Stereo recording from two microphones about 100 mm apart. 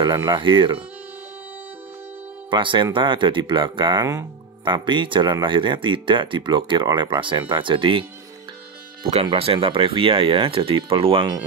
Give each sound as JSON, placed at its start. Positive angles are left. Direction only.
{"t": 0.0, "sound": "speech", "side_deg": -50}
{"t": 2.5, "sound": "speech", "side_deg": -55}
{"t": 4.0, "sound": "speech", "side_deg": -35}
{"t": 4.6, "sound": "speech", "side_deg": -55}
{"t": 9.2, "sound": "speech", "side_deg": -60}